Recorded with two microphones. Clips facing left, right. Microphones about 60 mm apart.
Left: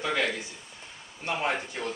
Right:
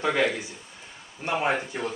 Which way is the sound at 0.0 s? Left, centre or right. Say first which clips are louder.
Right 4 dB; centre.